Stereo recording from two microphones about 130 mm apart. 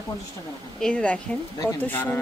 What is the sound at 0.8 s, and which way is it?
Speech, 10° left (ahead or behind).